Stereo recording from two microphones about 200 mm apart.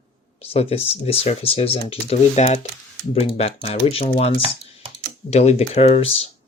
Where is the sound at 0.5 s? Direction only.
30° left (ahead or behind).